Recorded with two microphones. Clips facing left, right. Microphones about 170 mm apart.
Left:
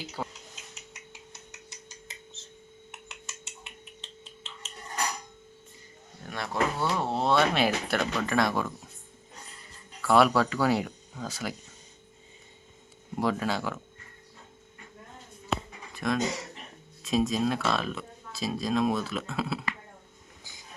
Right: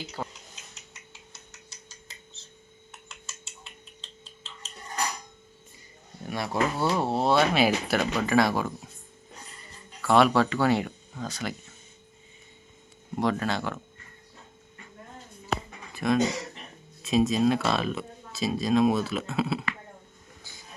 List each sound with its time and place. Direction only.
0.2 s speech: centre (ahead or behind)
1.1 s a sound: 15° left (ahead or behind)
6.2 s speech: 10° right (ahead or behind)
10.0 s speech: centre (ahead or behind)
13.1 s speech: 5° left (ahead or behind)
16.0 s speech: 5° right (ahead or behind)